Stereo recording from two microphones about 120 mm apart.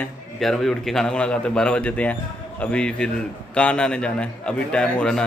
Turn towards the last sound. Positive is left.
turn(degrees=10)  # may be behind; listen again after turning